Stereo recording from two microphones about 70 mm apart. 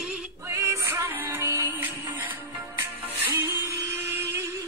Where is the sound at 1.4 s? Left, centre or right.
Right.